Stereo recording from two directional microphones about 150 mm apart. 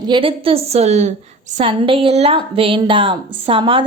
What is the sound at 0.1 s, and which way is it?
A woman's voice, 35° right (ahead or behind).